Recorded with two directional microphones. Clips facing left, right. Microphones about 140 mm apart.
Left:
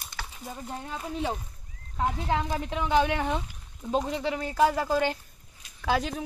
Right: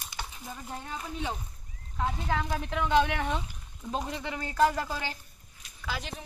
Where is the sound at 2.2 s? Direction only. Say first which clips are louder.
Left 3 dB; 25° left (ahead or behind).